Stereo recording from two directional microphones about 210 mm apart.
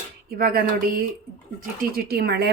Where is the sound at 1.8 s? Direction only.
45° right (ahead or behind).